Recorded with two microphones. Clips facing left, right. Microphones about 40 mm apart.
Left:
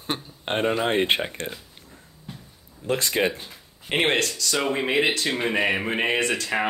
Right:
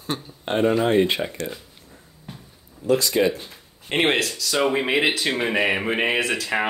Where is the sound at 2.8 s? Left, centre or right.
Left.